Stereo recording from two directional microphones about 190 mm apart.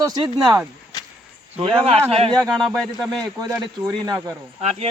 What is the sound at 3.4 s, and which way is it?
Speech, 15° right (ahead or behind).